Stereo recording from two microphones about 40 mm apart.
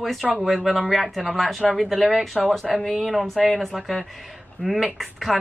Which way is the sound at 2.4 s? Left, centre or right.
Centre.